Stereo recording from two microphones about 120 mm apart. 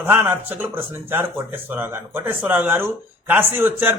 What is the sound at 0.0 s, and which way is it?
A man's voice, 15° right (ahead or behind).